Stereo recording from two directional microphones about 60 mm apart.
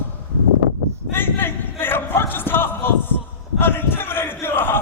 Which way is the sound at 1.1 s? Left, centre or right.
Left.